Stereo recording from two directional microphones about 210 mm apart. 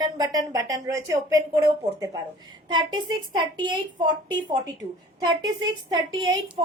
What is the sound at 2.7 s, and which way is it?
A child's voice, 20° right (ahead or behind).